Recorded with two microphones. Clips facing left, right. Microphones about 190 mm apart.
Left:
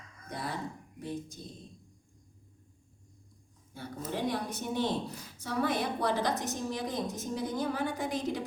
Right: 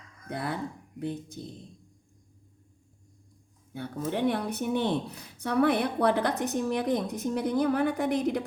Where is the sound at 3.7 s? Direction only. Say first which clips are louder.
Right 6 dB; 60° right (ahead or behind).